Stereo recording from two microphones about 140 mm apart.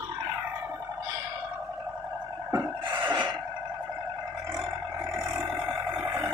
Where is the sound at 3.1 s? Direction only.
35° right (ahead or behind).